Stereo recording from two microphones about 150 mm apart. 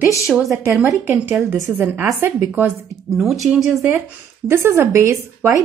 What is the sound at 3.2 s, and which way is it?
Speech, centre (ahead or behind).